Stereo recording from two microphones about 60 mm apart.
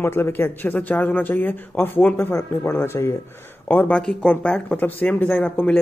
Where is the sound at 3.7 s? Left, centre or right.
Left.